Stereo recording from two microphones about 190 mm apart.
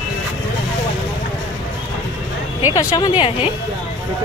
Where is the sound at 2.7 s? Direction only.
20° left (ahead or behind).